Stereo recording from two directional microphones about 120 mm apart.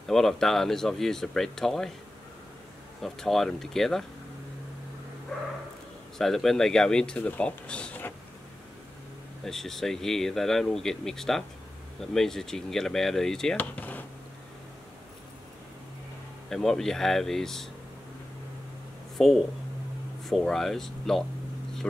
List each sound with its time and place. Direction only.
0.1 s speech: 5° left (ahead or behind)
3.0 s speech: centre (ahead or behind)
6.1 s speech: 5° left (ahead or behind)
9.4 s speech: 5° left (ahead or behind)
16.4 s speech: 5° left (ahead or behind)
19.2 s speech: centre (ahead or behind)